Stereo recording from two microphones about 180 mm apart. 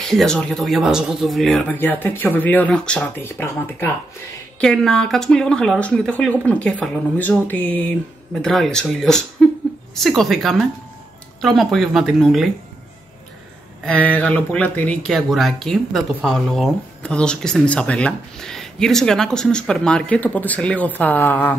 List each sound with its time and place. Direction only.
0.0 s speech: centre (ahead or behind)
13.8 s speech: 10° left (ahead or behind)